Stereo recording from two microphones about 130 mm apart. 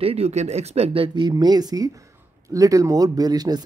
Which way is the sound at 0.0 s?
50° right (ahead or behind).